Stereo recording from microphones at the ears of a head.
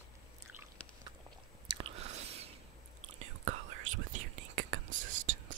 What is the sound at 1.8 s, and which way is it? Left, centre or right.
Chewing, right.